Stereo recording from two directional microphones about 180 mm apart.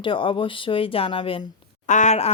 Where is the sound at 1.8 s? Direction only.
40° left (ahead or behind).